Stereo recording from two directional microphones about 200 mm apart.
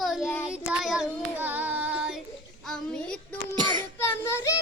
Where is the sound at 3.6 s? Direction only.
25° right (ahead or behind).